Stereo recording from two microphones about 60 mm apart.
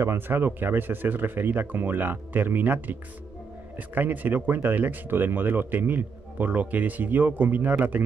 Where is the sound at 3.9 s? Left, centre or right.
Right.